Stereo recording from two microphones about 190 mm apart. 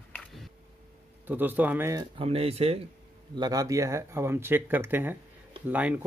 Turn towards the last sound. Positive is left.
turn(degrees=-10)  # may be behind; listen again after turning